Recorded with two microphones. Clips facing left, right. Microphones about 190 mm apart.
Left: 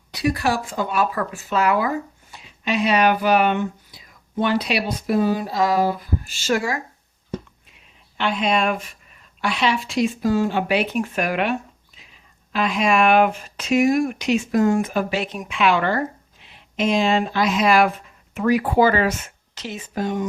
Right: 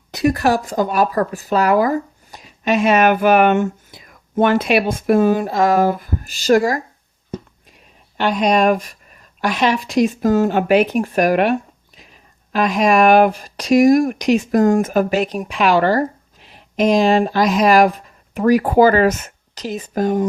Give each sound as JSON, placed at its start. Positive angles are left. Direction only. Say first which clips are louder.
{"t": 0.1, "sound": "speech", "louder": "right 5 dB", "side_deg": -45}
{"t": 8.2, "sound": "speech", "louder": "right 6 dB", "side_deg": -40}